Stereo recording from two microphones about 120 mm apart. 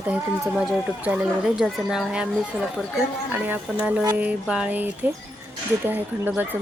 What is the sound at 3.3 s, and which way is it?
Speech, 15° right (ahead or behind).